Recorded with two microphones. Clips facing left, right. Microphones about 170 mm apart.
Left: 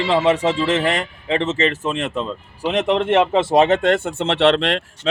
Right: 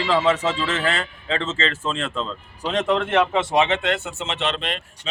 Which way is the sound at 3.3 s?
35° left (ahead or behind).